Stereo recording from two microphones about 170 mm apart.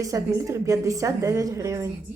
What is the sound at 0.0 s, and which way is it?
A woman's voice, 20° right (ahead or behind).